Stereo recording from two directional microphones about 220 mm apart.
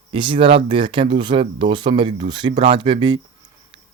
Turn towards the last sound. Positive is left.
turn(degrees=-20)  # may be behind; listen again after turning